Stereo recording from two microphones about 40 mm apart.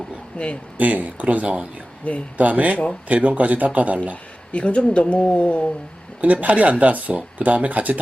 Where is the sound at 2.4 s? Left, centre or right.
Right.